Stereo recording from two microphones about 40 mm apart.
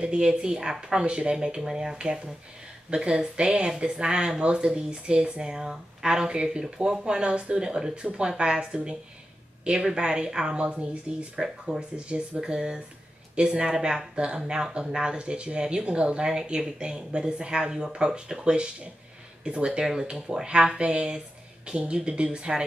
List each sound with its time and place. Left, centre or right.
0.0 s speech: right
11.3 s speech: centre
12.1 s speech: right